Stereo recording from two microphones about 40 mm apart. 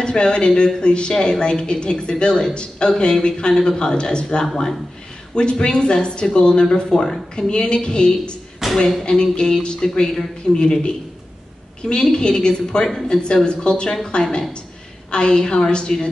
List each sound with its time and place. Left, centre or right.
0.0 s a woman's voice: left
8.6 s a sound: centre
9.0 s a woman's voice: left
11.9 s a woman's voice: left